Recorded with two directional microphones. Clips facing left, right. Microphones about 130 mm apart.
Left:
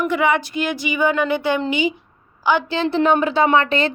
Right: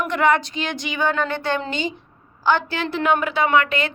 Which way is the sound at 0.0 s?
10° left (ahead or behind).